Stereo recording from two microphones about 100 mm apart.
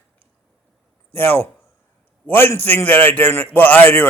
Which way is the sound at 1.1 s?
20° left (ahead or behind).